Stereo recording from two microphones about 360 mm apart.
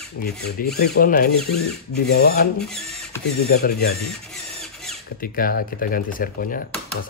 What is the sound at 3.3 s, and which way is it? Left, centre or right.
Speech, left.